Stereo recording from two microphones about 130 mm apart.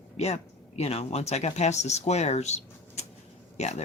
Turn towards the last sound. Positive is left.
turn(degrees=60)  # may be behind; listen again after turning